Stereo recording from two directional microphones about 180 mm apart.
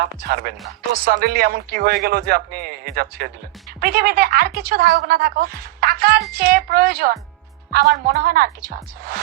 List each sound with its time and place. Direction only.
0.3 s speech: 55° right (ahead or behind)